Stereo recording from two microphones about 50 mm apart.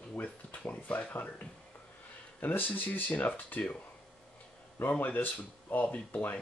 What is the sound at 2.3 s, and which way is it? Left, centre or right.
Speech, left.